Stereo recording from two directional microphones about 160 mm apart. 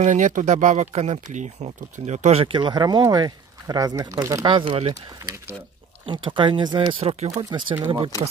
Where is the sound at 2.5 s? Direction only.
25° right (ahead or behind).